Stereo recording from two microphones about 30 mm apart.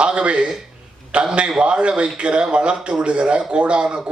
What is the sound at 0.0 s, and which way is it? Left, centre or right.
A man's voice, right.